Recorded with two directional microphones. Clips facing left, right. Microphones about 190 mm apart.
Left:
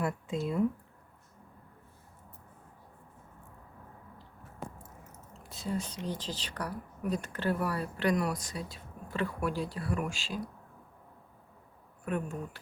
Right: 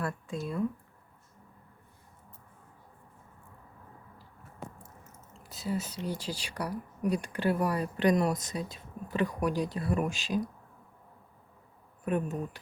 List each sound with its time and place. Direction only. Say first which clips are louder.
0.0 s speech: left 2 dB; 20° left (ahead or behind)
5.4 s whispering: right 1 dB; centre (ahead or behind)
6.1 s speech: right 2 dB; 10° right (ahead or behind)
12.0 s speech: right 4 dB; 20° right (ahead or behind)